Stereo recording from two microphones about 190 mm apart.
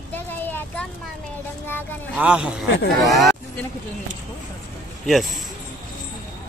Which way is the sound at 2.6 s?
70° left (ahead or behind).